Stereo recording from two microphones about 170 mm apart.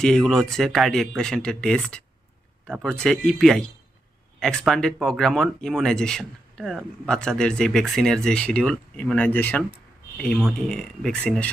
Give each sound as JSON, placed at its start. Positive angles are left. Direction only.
{"t": 0.0, "sound": "speech", "side_deg": 5}